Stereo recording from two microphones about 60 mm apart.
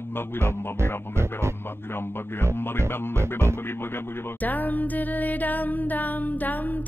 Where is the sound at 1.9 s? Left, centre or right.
Left.